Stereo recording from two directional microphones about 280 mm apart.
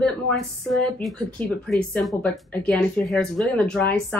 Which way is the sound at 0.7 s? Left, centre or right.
Centre.